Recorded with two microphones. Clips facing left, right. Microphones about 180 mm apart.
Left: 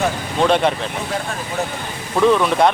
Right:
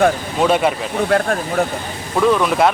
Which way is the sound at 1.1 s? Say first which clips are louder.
Right 12 dB; 65° right (ahead or behind).